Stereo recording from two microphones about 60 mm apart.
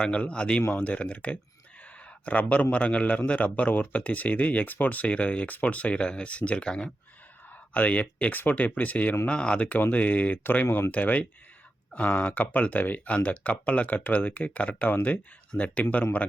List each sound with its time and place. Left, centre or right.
0.0 s a man's voice: centre